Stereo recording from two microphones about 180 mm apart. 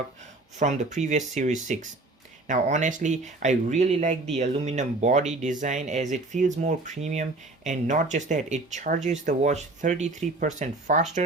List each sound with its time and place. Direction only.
0.6 s speech: 40° right (ahead or behind)